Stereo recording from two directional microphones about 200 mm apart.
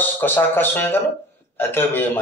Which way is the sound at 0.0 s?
10° left (ahead or behind).